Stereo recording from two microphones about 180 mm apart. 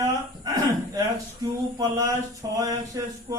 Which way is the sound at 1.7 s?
20° right (ahead or behind).